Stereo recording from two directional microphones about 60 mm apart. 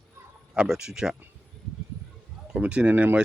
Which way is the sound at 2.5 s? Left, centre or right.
Right.